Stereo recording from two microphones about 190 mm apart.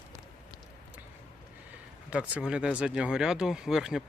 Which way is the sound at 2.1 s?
5° right (ahead or behind).